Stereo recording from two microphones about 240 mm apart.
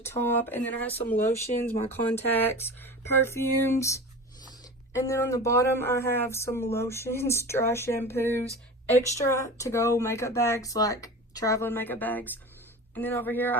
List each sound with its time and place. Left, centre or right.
0.0 s speech: centre
1.5 s speech: left
1.9 s speech: centre